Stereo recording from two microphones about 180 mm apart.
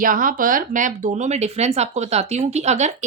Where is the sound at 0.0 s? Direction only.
50° right (ahead or behind).